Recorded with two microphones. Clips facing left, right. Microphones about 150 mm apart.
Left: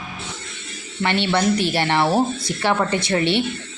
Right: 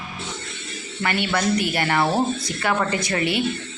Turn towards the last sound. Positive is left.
turn(degrees=30)  # may be behind; listen again after turning